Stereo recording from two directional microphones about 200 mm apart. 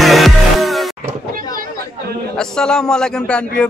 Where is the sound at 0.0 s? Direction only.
Centre (ahead or behind).